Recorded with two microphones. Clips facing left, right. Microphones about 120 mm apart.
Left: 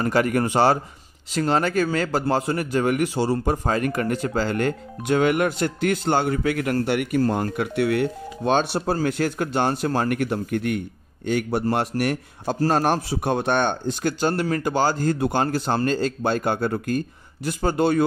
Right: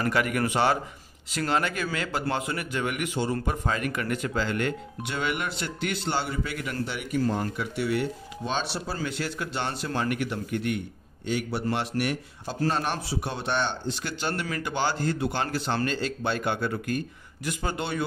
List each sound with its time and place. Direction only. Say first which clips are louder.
0.0 s a man's voice: left 5 dB; 35° left (ahead or behind)